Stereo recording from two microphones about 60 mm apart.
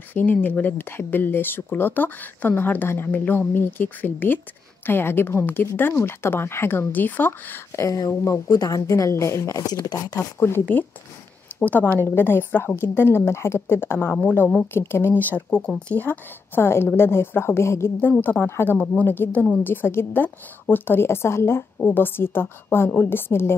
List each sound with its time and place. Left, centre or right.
0.1 s speech: left
7.7 s a woman's voice: left
8.5 s a woman's voice: left
11.6 s a woman's voice: left
15.1 s a woman's voice: left
18.2 s speech: left
21.7 s speech: left